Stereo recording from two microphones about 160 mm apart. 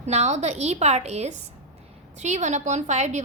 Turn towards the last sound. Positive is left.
turn(degrees=-45)  # may be behind; listen again after turning